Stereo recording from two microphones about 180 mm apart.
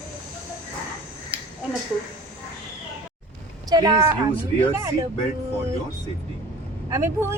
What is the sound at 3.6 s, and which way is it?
A woman's voice, 20° right (ahead or behind).